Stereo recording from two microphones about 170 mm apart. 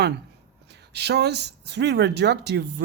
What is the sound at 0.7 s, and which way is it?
A man's voice, 80° right.